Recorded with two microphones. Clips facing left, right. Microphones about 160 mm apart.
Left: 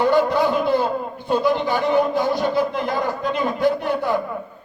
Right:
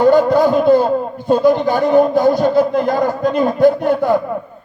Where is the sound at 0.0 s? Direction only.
45° right (ahead or behind).